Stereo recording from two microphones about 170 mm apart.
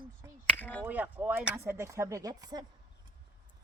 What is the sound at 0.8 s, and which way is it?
Speech, 10° right (ahead or behind).